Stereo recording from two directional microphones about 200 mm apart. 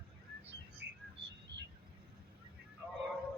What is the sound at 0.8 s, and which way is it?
Bird, 60° right (ahead or behind).